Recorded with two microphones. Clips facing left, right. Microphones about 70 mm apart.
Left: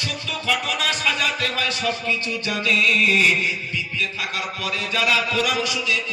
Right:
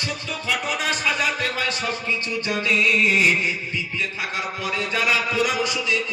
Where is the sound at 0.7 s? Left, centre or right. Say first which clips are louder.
Even; right.